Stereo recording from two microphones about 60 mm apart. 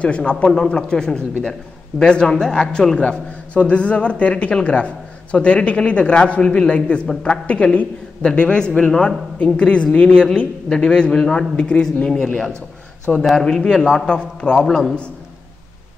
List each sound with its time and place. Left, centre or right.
0.0 s a man's voice: centre